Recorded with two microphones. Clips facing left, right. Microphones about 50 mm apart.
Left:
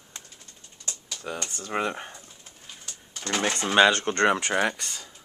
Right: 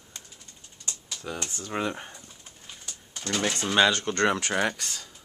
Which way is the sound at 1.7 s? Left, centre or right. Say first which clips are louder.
Left 2 dB; centre.